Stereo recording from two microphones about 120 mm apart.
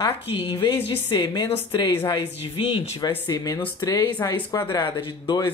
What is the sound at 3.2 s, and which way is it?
Speech, 35° left (ahead or behind).